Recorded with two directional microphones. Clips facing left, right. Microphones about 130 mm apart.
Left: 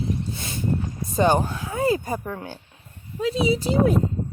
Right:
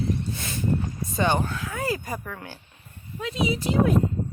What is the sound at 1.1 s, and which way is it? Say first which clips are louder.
Speech: left 4 dB; 40° left (ahead or behind).